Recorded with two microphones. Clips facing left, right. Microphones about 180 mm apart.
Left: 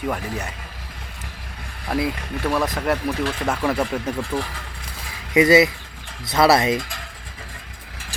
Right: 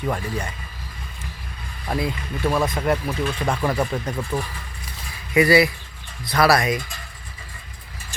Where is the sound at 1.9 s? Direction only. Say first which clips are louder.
Left 2 dB; 5° left (ahead or behind).